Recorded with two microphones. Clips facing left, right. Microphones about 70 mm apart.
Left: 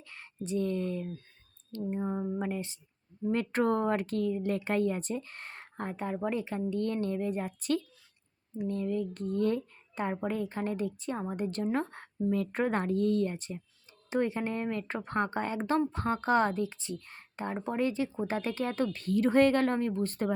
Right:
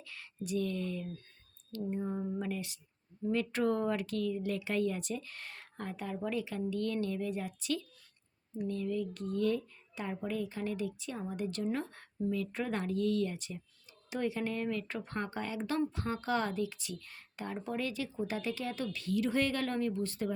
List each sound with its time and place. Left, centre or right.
0.0 s speech: left
1.8 s a sound: left
3.2 s a woman's voice: left